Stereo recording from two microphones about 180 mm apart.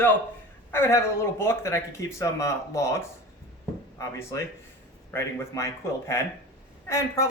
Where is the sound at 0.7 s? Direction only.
15° left (ahead or behind).